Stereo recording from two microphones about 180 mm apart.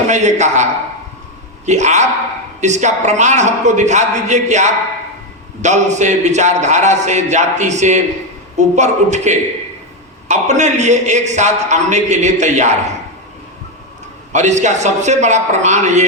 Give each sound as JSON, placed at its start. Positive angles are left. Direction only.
{"t": 0.1, "sound": "a man's voice", "side_deg": -40}
{"t": 14.3, "sound": "a man's voice", "side_deg": -40}